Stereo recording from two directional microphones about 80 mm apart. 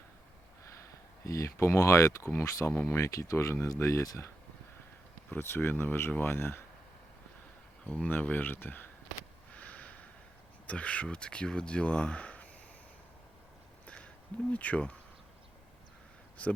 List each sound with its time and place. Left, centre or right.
1.2 s speech: left
5.3 s speech: left
7.9 s speech: centre
9.6 s snort: centre
10.7 s speech: centre
13.8 s a sound: centre
14.5 s speech: centre